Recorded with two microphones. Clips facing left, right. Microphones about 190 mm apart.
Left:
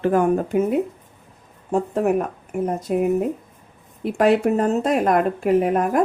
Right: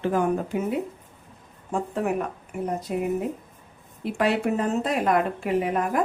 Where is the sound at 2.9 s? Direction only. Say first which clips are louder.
Left 8 dB; 50° left (ahead or behind).